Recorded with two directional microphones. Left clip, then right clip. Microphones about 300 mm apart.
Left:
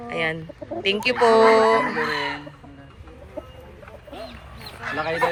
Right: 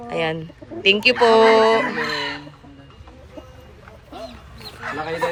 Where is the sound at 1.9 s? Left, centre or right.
Left.